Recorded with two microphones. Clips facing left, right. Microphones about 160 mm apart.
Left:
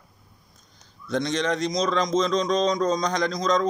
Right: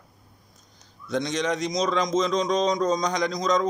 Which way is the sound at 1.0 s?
15° right (ahead or behind).